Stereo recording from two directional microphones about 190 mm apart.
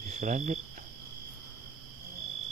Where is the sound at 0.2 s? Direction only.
40° right (ahead or behind).